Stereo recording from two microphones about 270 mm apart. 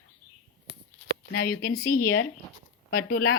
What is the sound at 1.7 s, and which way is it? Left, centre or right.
Speech, left.